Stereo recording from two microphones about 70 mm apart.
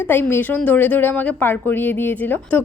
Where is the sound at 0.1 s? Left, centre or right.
Left.